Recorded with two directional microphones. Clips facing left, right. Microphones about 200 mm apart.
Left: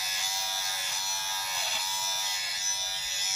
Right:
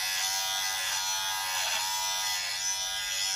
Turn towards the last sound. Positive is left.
turn(degrees=5)  # may be behind; listen again after turning